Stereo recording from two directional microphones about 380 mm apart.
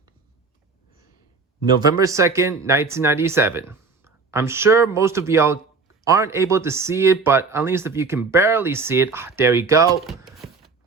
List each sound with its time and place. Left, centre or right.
1.8 s speech: centre